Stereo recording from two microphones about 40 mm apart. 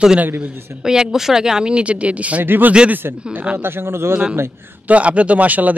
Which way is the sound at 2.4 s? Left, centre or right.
Right.